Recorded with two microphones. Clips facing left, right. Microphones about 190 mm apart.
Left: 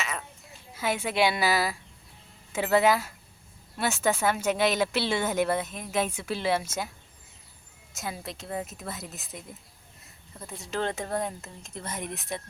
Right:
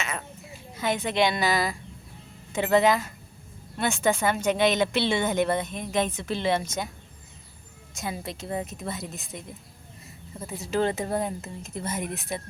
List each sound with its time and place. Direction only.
0.8 s a woman's voice: 5° left (ahead or behind)
7.9 s a woman's voice: centre (ahead or behind)
10.4 s a woman's voice: 5° right (ahead or behind)